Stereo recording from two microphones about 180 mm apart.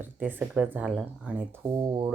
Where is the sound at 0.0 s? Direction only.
10° right (ahead or behind).